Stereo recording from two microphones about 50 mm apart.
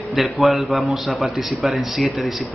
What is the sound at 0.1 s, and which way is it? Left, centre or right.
Speech, centre.